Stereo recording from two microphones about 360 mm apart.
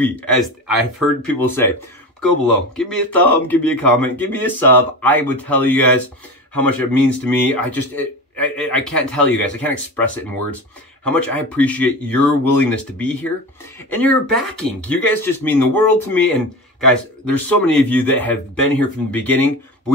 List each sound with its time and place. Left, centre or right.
0.0 s a man's voice: centre